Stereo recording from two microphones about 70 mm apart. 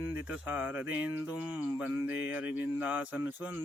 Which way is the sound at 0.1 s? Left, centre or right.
Right.